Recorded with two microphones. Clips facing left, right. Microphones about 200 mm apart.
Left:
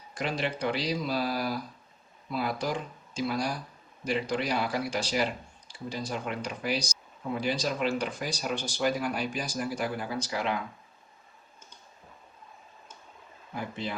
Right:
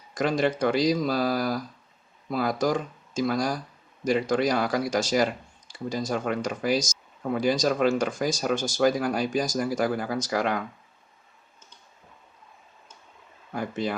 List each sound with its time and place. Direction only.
0.2 s speech: 45° right (ahead or behind)
13.6 s speech: 45° right (ahead or behind)